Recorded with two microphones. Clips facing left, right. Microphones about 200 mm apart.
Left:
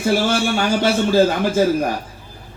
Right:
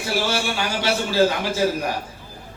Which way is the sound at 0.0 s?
50° left (ahead or behind).